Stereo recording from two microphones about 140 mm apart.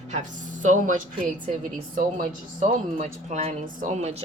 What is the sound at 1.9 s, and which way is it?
Speech, 75° right (ahead or behind).